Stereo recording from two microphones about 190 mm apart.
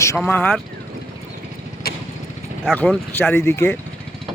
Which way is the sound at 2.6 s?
5° left (ahead or behind).